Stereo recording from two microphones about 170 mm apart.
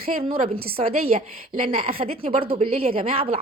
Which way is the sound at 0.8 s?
35° right (ahead or behind).